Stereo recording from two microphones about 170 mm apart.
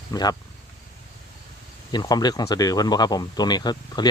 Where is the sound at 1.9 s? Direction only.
25° left (ahead or behind).